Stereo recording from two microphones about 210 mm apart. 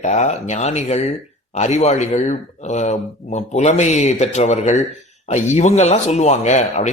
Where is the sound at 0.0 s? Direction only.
35° left (ahead or behind).